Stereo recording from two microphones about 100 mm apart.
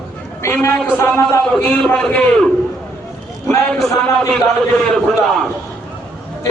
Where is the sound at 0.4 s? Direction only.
30° left (ahead or behind).